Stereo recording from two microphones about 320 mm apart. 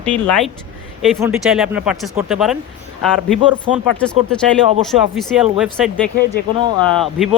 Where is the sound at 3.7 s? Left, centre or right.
Centre.